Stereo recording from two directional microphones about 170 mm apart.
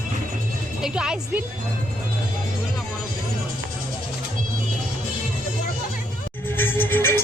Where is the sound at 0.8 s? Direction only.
5° right (ahead or behind).